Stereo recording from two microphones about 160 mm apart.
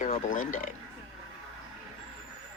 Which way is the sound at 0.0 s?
55° left (ahead or behind).